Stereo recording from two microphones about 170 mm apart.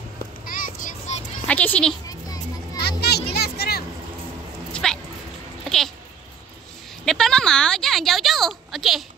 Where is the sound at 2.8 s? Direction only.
70° left (ahead or behind).